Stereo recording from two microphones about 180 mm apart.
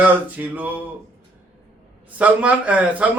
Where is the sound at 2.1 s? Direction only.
10° right (ahead or behind).